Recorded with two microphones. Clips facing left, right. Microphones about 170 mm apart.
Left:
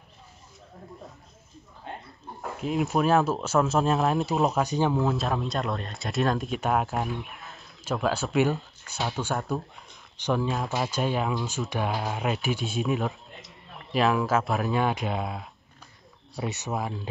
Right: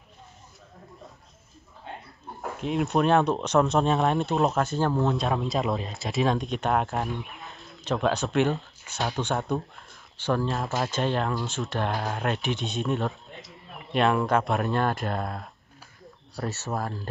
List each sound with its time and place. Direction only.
2.4 s speech: centre (ahead or behind)
4.6 s speech: 15° left (ahead or behind)
4.9 s speech: centre (ahead or behind)
10.1 s speech: 15° left (ahead or behind)
16.4 s speech: 15° left (ahead or behind)
16.7 s speech: centre (ahead or behind)